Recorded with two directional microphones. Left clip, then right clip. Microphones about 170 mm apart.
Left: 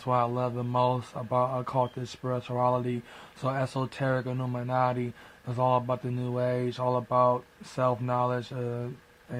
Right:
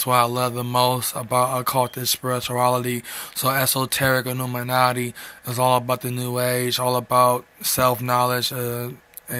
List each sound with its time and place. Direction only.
0.0 s speech: 20° right (ahead or behind)